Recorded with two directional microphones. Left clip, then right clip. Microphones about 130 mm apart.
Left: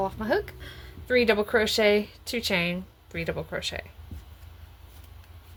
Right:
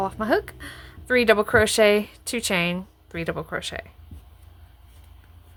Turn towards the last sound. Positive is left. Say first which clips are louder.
# right 2 dB
turn(degrees=-35)  # may be behind; listen again after turning